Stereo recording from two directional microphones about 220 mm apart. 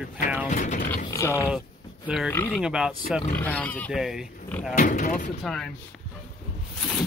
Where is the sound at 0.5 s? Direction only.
35° left (ahead or behind).